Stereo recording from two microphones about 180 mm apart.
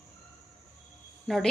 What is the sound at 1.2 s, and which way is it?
Speech, centre (ahead or behind).